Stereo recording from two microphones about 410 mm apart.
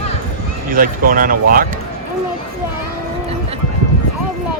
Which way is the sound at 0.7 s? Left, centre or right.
Right.